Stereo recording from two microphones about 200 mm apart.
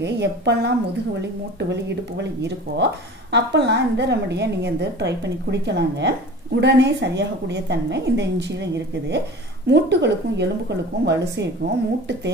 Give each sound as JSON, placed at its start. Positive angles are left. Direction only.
{"t": 0.0, "sound": "speech", "side_deg": -60}